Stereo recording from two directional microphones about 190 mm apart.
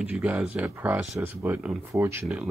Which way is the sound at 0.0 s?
10° right (ahead or behind).